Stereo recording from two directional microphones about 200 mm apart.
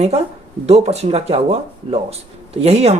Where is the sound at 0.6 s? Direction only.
30° right (ahead or behind).